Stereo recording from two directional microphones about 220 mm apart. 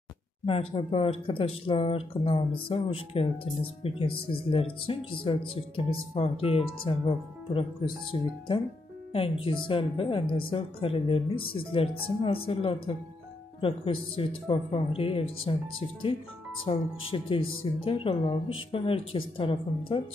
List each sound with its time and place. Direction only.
0.5 s a woman's voice: 25° left (ahead or behind)
16.6 s a woman's voice: 25° left (ahead or behind)